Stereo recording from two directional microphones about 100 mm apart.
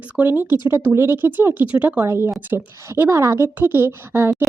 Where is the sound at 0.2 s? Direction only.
15° right (ahead or behind).